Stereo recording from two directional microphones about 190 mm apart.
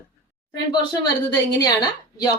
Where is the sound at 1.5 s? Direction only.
20° left (ahead or behind).